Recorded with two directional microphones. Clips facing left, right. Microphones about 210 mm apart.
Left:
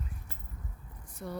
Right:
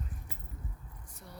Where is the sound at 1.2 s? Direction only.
65° left (ahead or behind).